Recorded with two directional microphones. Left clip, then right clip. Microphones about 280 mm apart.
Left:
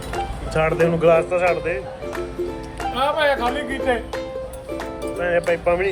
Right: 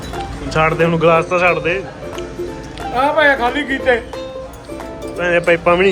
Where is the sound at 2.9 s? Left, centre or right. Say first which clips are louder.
Right 6 dB; centre.